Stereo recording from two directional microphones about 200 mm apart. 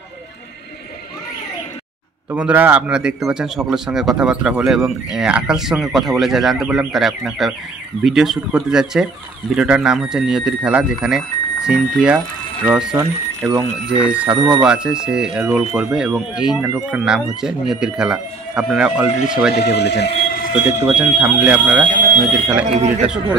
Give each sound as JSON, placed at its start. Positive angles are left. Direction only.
{"t": 2.3, "sound": "a man's voice", "side_deg": -5}
{"t": 14.3, "sound": "speech", "side_deg": -20}
{"t": 14.6, "sound": "a man's voice", "side_deg": -5}
{"t": 19.5, "sound": "speech", "side_deg": 55}
{"t": 20.8, "sound": "speech", "side_deg": -5}
{"t": 21.9, "sound": "speech", "side_deg": -45}